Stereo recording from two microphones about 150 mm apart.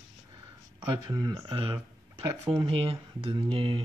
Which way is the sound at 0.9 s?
30° right (ahead or behind).